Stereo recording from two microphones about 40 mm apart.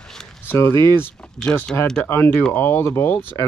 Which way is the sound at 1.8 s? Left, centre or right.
Centre.